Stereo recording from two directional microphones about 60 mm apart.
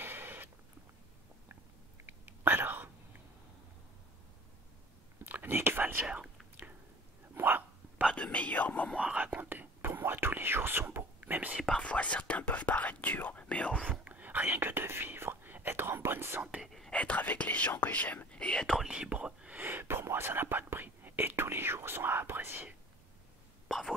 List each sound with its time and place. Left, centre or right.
0.0 s a sound: right
2.0 s whispering: right
5.2 s whispering: right
6.0 s speech: centre
7.3 s hiccup: right
8.1 s whispering: left
9.2 s whispering: right
11.6 s whispering: centre
14.0 s whispering: right
16.6 s whispering: centre
16.9 s speech: left
18.9 s whispering: centre
19.6 s whispering: right
23.7 s whispering: centre